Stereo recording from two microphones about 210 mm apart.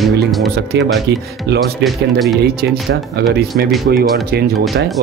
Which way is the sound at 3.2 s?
50° right (ahead or behind).